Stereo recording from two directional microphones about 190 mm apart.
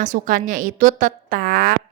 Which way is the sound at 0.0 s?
45° right (ahead or behind).